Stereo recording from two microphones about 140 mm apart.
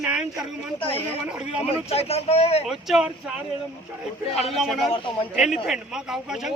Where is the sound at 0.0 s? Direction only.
5° right (ahead or behind).